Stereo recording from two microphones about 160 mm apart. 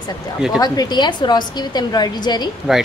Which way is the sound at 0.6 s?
25° left (ahead or behind).